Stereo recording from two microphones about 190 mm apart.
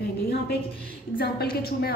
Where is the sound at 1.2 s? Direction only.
55° left (ahead or behind).